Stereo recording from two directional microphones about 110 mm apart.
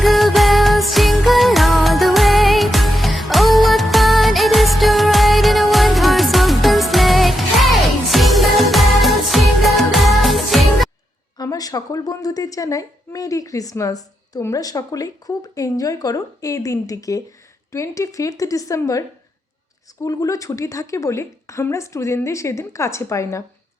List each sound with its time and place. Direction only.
0.0 s music: centre (ahead or behind)
11.3 s a woman's voice: 35° left (ahead or behind)
20.0 s a woman's voice: 30° left (ahead or behind)